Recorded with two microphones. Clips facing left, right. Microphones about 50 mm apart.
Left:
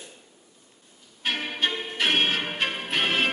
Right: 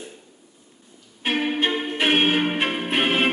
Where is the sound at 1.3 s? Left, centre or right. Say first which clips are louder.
Right 6 dB; right.